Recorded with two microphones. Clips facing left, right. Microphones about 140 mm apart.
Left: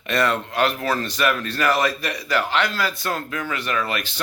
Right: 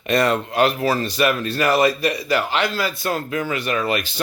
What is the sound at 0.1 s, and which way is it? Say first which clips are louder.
Speech: right 3 dB; 15° right (ahead or behind).